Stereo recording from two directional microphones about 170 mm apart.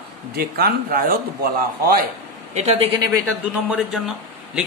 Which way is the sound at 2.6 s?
35° right (ahead or behind).